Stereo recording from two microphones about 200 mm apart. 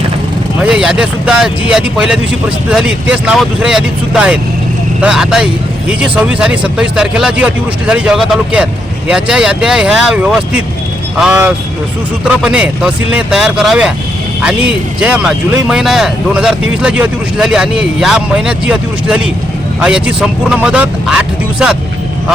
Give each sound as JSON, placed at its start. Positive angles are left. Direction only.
{"t": 0.6, "sound": "speech", "side_deg": -5}